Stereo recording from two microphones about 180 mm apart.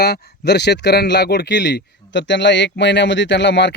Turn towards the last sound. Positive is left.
turn(degrees=75)  # may be behind; listen again after turning